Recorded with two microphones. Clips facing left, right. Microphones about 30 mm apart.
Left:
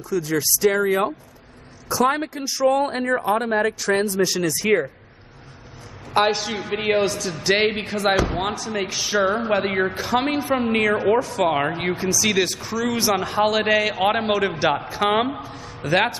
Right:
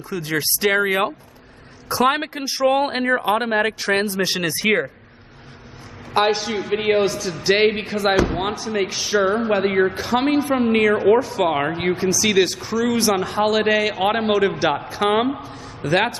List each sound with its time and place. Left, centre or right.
0.1 s speech: right
6.1 s speech: centre
11.1 s speech: centre
11.5 s speech: centre